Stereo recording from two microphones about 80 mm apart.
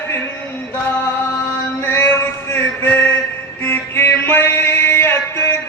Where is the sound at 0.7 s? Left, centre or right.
Left.